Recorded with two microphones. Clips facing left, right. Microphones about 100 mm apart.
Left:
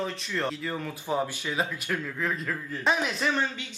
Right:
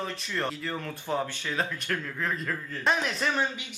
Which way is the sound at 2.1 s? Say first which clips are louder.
Left 1 dB; centre (ahead or behind).